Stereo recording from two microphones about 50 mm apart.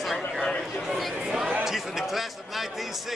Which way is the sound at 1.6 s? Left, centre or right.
Centre.